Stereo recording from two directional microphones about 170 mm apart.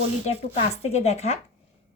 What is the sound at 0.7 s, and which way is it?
Speech, 40° left (ahead or behind).